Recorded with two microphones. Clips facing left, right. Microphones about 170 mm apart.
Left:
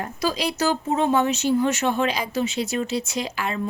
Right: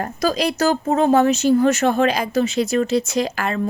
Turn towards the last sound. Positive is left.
turn(degrees=-45)  # may be behind; listen again after turning